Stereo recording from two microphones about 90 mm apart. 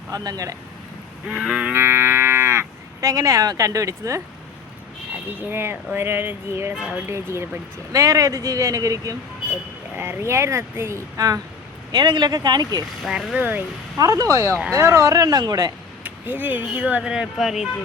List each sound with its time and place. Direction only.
0.1 s speech: 40° right (ahead or behind)
1.3 s speech: 15° right (ahead or behind)
1.7 s cattle: 25° right (ahead or behind)
3.1 s speech: 40° right (ahead or behind)
5.4 s speech: 25° right (ahead or behind)
7.9 s speech: 40° right (ahead or behind)
10.0 s speech: 25° right (ahead or behind)
11.9 s speech: 55° right (ahead or behind)
13.0 s speech: centre (ahead or behind)
14.0 s speech: 40° right (ahead or behind)
16.0 s speech: 20° right (ahead or behind); by 17.7 s 5° right (ahead or behind)